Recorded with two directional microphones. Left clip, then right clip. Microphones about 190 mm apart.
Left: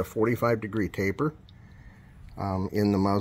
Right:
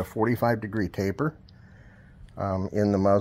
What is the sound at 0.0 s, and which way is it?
Speech, 45° right (ahead or behind).